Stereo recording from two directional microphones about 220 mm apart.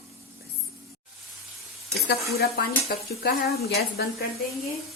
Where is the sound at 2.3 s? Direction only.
45° left (ahead or behind).